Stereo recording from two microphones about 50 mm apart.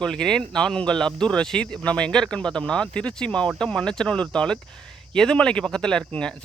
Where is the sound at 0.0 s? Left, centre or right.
Centre.